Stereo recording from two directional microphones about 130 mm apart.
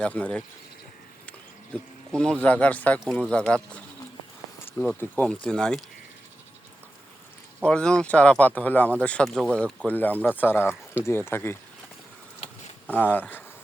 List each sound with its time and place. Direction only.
0.0 s speech: 10° left (ahead or behind)
4.9 s speech: 10° left (ahead or behind)
7.6 s speech: 5° left (ahead or behind)
12.9 s speech: 15° left (ahead or behind)